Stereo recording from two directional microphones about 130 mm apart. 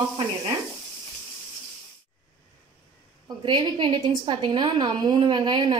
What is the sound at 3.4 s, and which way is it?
A woman's voice, 40° right (ahead or behind).